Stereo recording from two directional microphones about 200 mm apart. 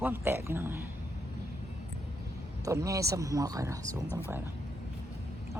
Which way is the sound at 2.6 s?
15° right (ahead or behind).